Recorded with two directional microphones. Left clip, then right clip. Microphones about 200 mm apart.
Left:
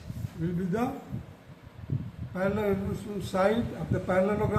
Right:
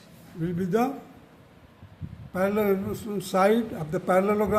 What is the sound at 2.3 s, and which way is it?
A man's voice, 60° right (ahead or behind).